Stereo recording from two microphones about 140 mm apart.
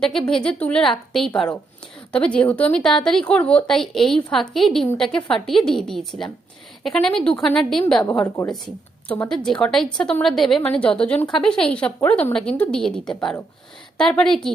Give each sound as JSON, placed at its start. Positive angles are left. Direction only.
{"t": 0.0, "sound": "a woman's voice", "side_deg": 5}